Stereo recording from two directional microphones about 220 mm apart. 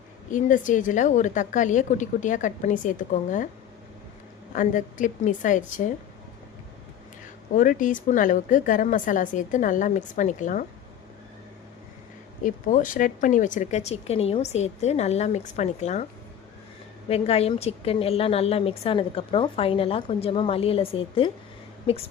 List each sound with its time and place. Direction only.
0.3 s speech: 35° left (ahead or behind)
4.5 s speech: 35° left (ahead or behind)
7.5 s speech: 35° left (ahead or behind)
12.4 s speech: 35° left (ahead or behind)
17.1 s a woman's voice: 25° left (ahead or behind)